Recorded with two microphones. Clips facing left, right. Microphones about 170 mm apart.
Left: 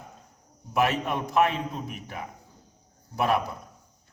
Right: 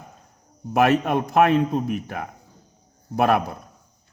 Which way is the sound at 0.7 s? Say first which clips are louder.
Right 7 dB; 55° right (ahead or behind).